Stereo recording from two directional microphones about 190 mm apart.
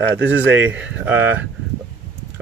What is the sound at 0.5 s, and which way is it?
Speech, 10° right (ahead or behind).